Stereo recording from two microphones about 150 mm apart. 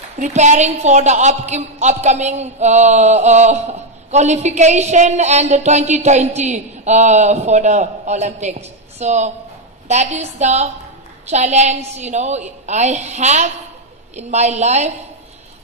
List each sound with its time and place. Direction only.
0.2 s a woman's voice: 50° right (ahead or behind)